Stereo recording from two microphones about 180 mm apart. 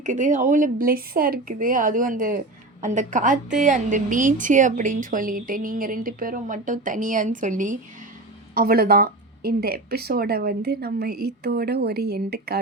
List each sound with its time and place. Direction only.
0.0 s a woman's voice: 45° right (ahead or behind)
8.5 s speech: 55° right (ahead or behind)